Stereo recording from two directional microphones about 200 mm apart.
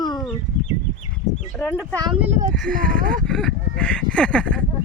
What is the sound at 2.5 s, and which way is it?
Speech, 5° left (ahead or behind).